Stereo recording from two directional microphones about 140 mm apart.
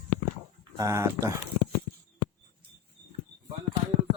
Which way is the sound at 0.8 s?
20° right (ahead or behind).